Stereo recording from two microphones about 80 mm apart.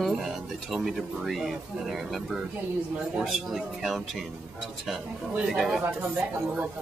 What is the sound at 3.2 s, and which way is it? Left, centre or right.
Speech, centre.